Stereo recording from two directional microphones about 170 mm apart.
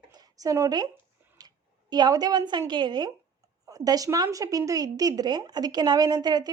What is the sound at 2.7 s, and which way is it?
A woman's voice, 25° right (ahead or behind).